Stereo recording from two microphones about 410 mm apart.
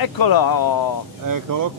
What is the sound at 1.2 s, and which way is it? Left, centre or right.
Speech, right.